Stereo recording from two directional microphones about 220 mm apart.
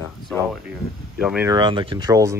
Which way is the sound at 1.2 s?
5° right (ahead or behind).